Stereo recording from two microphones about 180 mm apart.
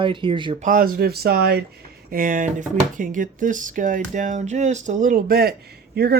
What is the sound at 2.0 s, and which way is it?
Speech, 50° right (ahead or behind).